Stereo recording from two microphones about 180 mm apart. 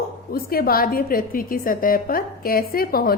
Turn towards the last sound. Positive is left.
turn(degrees=55)  # may be behind; listen again after turning